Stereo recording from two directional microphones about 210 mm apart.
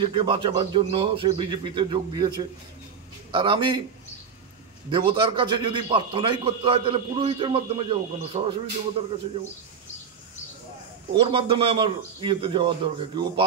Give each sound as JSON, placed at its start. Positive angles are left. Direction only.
{"t": 0.0, "sound": "a man's voice", "side_deg": -25}
{"t": 4.9, "sound": "a man's voice", "side_deg": -25}
{"t": 11.1, "sound": "a man's voice", "side_deg": -25}